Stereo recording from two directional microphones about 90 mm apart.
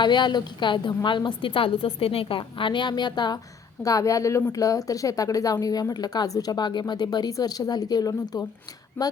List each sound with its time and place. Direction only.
0.0 s a woman's voice: 55° left (ahead or behind)
3.8 s speech: 40° left (ahead or behind)
9.0 s a woman's voice: 20° left (ahead or behind)